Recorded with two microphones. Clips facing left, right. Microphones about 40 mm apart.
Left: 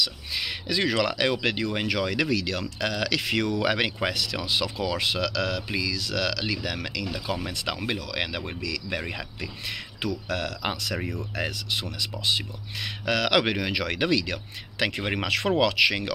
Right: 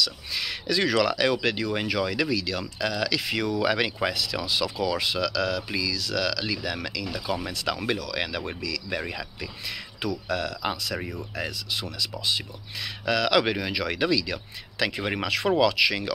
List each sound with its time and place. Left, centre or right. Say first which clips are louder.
0.0 s speech: even; left
1.9 s speech: left 1 dB; left
4.1 s speech: even; left
4.4 s speech: right 1 dB; left
7.9 s speech: right 1 dB; left
10.2 s speech: right 1 dB; left
15.2 s speech: right 1 dB; left